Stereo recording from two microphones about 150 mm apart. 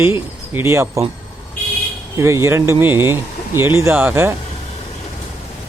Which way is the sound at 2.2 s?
20° right (ahead or behind).